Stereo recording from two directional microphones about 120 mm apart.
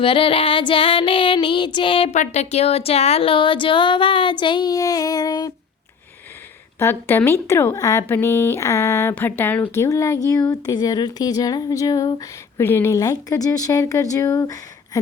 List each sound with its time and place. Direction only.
0.0 s speech: 45° left (ahead or behind)
2.1 s speech: 75° left (ahead or behind); by 5.5 s 35° left (ahead or behind)
6.7 s speech: 20° left (ahead or behind)
12.5 s speech: 20° left (ahead or behind)